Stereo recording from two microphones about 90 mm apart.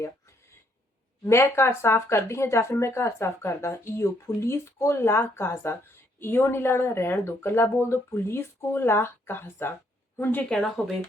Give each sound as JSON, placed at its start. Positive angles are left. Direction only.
{"t": 1.2, "sound": "speech", "side_deg": 30}
{"t": 10.5, "sound": "speech", "side_deg": 5}